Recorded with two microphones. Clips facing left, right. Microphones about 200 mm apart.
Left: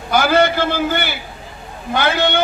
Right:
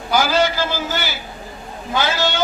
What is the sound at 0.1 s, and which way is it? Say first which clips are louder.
A man's voice: left 3 dB; 60° left (ahead or behind).